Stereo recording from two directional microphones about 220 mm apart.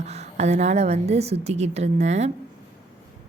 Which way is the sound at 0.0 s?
30° right (ahead or behind).